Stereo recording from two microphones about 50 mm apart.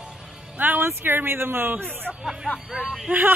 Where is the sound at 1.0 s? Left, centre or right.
Right.